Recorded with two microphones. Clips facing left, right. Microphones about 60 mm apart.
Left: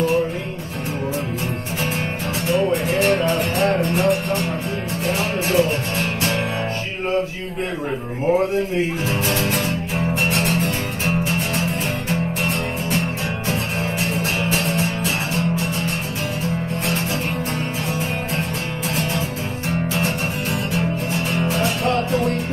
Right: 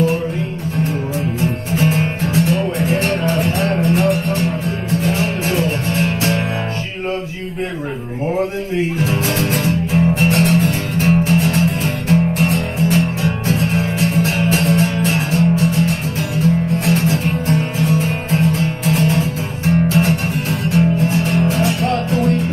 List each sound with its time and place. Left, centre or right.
3.0 s music: right
10.3 s music: right
14.1 s music: right
16.8 s music: right
21.3 s music: right